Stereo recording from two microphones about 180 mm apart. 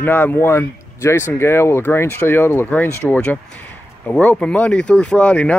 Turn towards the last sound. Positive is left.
turn(degrees=5)  # may be behind; listen again after turning